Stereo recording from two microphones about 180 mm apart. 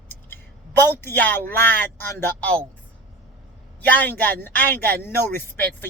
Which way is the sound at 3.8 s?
10° left (ahead or behind).